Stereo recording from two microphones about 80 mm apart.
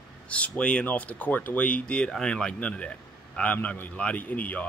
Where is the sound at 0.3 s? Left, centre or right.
Centre.